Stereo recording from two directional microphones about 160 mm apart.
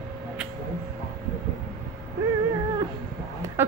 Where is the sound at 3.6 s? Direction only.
15° right (ahead or behind).